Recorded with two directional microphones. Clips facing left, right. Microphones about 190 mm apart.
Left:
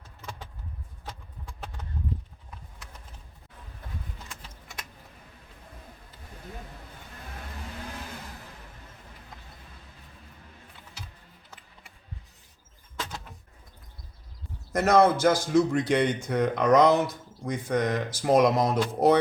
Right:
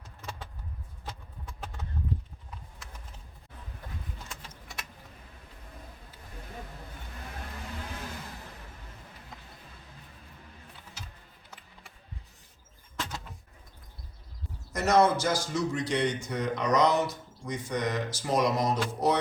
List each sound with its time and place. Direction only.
14.7 s a man's voice: 55° left (ahead or behind)